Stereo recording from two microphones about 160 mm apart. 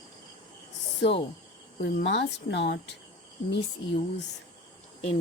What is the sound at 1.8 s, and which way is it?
Speech, 85° left.